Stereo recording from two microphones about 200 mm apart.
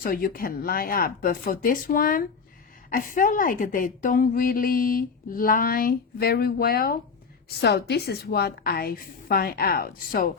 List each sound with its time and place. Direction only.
0.0 s a woman's voice: 45° left (ahead or behind)